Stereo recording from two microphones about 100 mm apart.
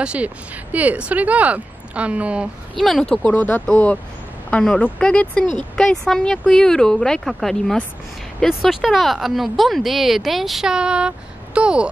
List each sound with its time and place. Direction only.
0.0 s speech: 10° right (ahead or behind)
2.8 s speech: 5° left (ahead or behind)